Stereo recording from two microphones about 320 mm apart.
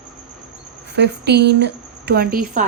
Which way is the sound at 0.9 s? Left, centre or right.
Right.